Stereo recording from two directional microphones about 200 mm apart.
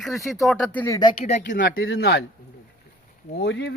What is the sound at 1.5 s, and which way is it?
Speech, 65° left (ahead or behind).